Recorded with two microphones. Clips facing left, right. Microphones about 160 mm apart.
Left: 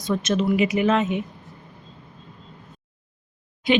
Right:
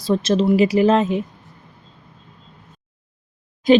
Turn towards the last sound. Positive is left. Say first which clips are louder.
# right 7 dB
turn(degrees=-40)  # may be behind; listen again after turning